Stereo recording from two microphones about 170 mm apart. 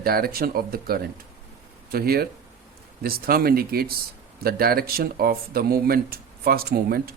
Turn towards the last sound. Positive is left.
turn(degrees=-65)  # may be behind; listen again after turning